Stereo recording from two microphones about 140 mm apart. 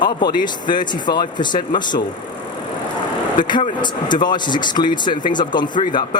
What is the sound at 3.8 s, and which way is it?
Speech, 35° left (ahead or behind).